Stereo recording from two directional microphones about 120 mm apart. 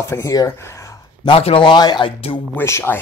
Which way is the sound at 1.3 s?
50° left (ahead or behind).